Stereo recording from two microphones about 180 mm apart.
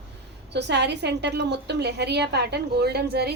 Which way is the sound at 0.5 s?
70° right (ahead or behind).